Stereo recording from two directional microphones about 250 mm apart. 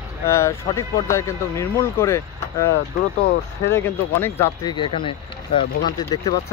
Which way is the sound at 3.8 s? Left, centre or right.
Centre.